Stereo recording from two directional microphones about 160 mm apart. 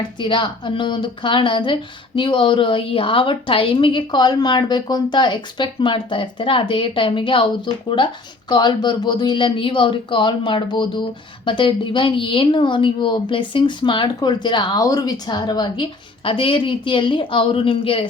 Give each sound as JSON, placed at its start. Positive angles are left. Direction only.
{"t": 0.2, "sound": "a woman's voice", "side_deg": 30}